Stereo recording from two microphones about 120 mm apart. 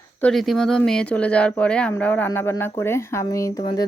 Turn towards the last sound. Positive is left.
turn(degrees=25)  # may be behind; listen again after turning